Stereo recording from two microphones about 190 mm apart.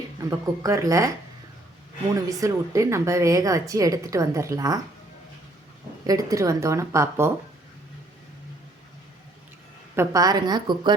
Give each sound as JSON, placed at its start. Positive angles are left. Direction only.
{"t": 0.3, "sound": "speech", "side_deg": -15}
{"t": 2.4, "sound": "speech", "side_deg": -15}
{"t": 6.1, "sound": "speech", "side_deg": -20}
{"t": 9.9, "sound": "a woman's voice", "side_deg": -15}